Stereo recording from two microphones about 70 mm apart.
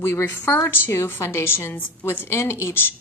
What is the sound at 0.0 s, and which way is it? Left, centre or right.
A woman's voice, left.